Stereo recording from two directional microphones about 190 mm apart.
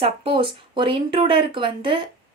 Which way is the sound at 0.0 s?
30° right (ahead or behind).